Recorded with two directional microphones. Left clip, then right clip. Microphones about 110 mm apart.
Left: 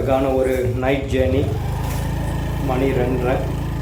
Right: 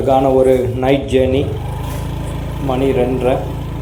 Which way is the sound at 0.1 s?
30° right (ahead or behind).